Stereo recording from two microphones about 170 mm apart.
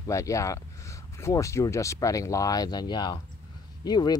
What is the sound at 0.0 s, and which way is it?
Speech, 20° left (ahead or behind).